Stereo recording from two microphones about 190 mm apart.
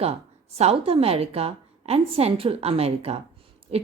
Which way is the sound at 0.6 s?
30° right (ahead or behind).